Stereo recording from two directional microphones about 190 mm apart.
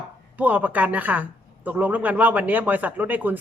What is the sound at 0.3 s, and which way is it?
A woman's voice, 10° right (ahead or behind).